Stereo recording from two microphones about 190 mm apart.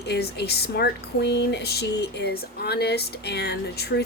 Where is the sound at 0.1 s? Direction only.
60° left (ahead or behind).